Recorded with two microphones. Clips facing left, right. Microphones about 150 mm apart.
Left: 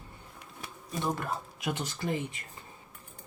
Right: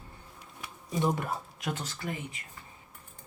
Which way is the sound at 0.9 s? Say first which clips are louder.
Right 3 dB; 15° right (ahead or behind).